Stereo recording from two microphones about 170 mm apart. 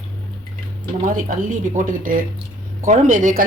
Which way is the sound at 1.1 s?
50° right (ahead or behind).